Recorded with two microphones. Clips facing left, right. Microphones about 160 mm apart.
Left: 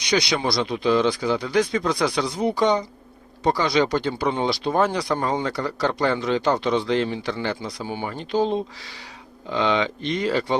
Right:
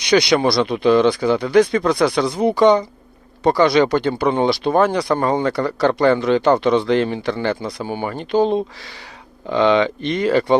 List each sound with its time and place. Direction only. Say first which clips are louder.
0.0 s speech: right 7 dB; 65° right (ahead or behind)